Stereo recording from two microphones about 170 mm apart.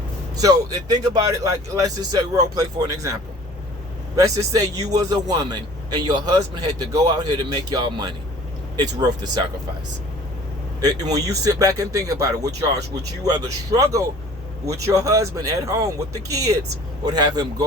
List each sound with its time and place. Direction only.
0.3 s speech: 20° right (ahead or behind)
10.8 s speech: 20° right (ahead or behind)